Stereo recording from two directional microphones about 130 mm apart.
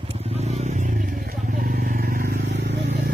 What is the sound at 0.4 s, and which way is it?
Vehicle, 60° right (ahead or behind).